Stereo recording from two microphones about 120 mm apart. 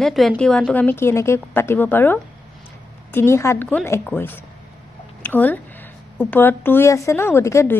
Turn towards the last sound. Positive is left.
turn(degrees=25)  # may be behind; listen again after turning